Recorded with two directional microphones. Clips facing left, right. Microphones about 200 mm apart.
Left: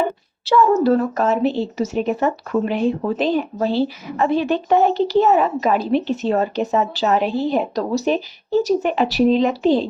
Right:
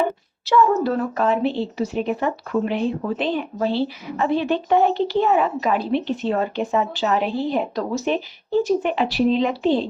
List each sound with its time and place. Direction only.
0.4 s a woman's voice: 40° left (ahead or behind)